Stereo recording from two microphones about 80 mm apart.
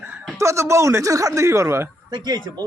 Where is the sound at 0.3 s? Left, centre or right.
Right.